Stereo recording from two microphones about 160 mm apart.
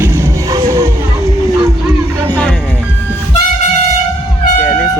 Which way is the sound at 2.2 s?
10° left (ahead or behind).